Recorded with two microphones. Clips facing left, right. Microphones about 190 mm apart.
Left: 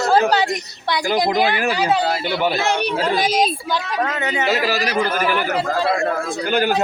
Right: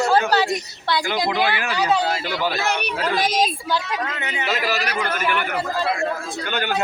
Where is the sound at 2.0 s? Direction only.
25° left (ahead or behind).